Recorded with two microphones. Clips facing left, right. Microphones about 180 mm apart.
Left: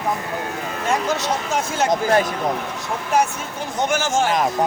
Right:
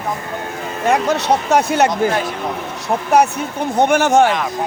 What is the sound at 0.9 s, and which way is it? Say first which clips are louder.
Speech: right 6 dB; 65° right (ahead or behind).